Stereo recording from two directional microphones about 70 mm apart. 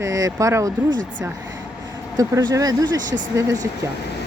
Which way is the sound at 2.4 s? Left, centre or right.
Right.